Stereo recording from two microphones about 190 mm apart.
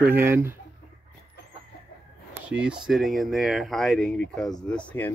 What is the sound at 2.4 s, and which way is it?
Speech, 5° right (ahead or behind).